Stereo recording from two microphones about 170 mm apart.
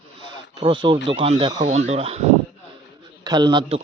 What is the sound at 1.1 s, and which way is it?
Speech, 35° right (ahead or behind).